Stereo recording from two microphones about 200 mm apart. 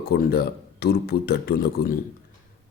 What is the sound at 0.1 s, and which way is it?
Speech, 50° left (ahead or behind).